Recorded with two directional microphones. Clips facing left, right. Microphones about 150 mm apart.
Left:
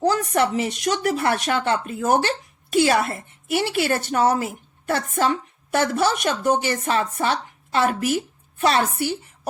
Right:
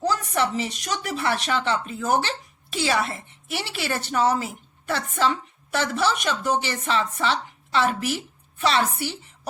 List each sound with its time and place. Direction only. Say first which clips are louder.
0.0 s speech: left 4 dB; 55° left (ahead or behind)